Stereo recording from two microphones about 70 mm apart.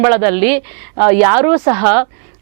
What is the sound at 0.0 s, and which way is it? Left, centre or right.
A woman's voice, right.